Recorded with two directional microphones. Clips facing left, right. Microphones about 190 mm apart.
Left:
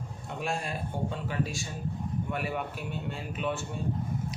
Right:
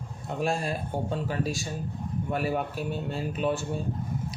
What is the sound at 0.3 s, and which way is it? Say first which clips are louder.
Speech: right 5 dB; 35° right (ahead or behind).